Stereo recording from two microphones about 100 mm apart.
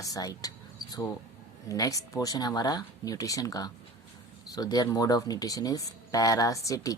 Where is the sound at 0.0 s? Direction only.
35° left (ahead or behind).